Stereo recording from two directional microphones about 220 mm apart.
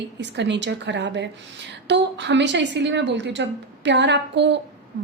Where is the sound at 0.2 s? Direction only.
55° right (ahead or behind).